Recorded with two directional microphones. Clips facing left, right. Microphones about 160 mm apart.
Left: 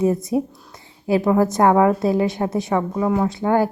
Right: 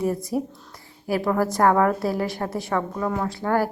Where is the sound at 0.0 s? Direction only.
20° left (ahead or behind).